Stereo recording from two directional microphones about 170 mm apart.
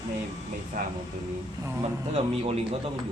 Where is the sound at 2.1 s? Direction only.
35° right (ahead or behind).